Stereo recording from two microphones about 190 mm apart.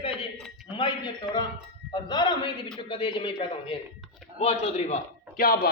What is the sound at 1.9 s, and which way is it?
A man's voice, 25° left (ahead or behind).